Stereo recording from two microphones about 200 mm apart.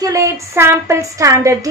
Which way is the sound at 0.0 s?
15° right (ahead or behind).